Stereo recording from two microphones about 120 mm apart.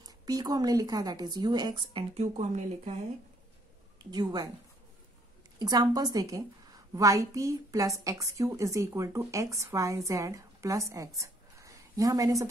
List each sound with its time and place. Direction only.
0.0 s a woman's voice: 35° right (ahead or behind)
2.1 s speech: 70° right (ahead or behind)
4.1 s a woman's voice: 35° right (ahead or behind)
5.6 s a woman's voice: 35° right (ahead or behind)
11.1 s a sound: 25° right (ahead or behind)